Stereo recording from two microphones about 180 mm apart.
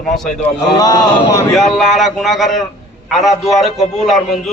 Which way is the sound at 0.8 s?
20° left (ahead or behind).